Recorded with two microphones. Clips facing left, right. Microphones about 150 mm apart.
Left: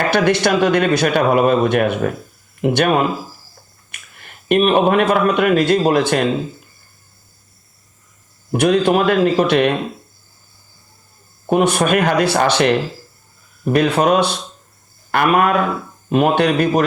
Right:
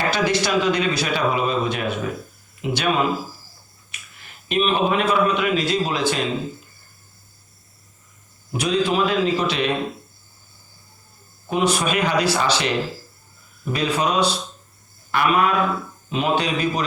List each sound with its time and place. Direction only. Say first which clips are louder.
0.1 s a man's voice: left 7 dB; 60° left (ahead or behind)
8.5 s speech: left 6 dB; 55° left (ahead or behind)
11.4 s a man's voice: left 6 dB; 55° left (ahead or behind)